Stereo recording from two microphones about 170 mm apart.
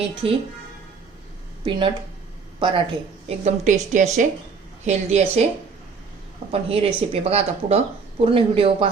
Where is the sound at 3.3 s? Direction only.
45° right (ahead or behind).